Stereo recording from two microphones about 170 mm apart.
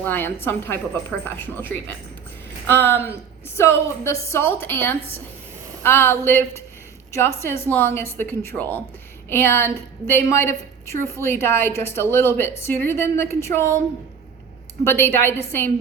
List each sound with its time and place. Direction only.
0.0 s a woman's voice: 10° left (ahead or behind)
14.8 s a woman's voice: 15° left (ahead or behind)